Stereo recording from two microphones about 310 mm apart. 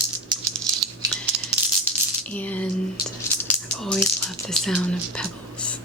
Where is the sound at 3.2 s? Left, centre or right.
Centre.